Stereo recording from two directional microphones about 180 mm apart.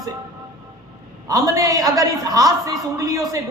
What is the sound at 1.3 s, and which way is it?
A man's voice, 20° right (ahead or behind).